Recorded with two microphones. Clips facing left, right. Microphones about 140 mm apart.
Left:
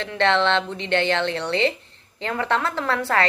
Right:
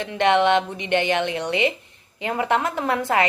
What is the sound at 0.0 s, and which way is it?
A woman's voice, 15° right (ahead or behind).